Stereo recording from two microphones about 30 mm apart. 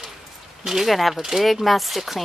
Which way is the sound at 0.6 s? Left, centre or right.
Centre.